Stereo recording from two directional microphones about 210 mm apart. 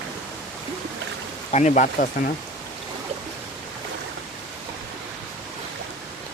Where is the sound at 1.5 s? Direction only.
35° left (ahead or behind).